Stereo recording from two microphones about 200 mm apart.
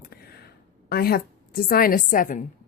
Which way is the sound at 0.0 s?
50° left (ahead or behind).